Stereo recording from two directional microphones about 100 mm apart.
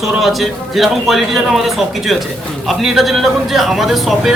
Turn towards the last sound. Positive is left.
turn(degrees=0)  # may be behind; listen again after turning